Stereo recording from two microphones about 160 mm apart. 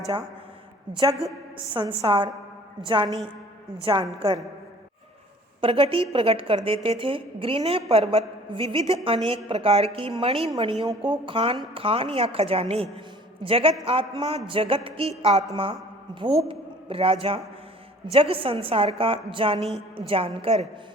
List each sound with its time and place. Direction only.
0.9 s a woman's voice: 25° right (ahead or behind)
5.5 s a woman's voice: 35° right (ahead or behind)
16.5 s a woman's voice: 35° right (ahead or behind)